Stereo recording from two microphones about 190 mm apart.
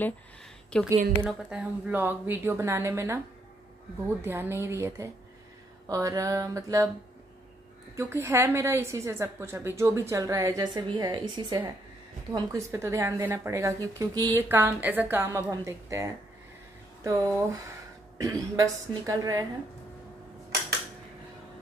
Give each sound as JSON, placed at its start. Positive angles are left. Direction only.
{"t": 0.7, "sound": "a woman's voice", "side_deg": 5}
{"t": 1.2, "sound": "a woman's voice", "side_deg": -5}
{"t": 4.2, "sound": "a woman's voice", "side_deg": -10}
{"t": 7.9, "sound": "a woman's voice", "side_deg": -15}